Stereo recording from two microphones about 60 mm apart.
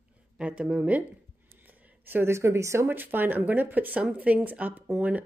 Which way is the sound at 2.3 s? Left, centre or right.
Right.